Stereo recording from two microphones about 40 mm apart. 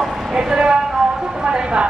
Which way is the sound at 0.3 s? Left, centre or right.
Centre.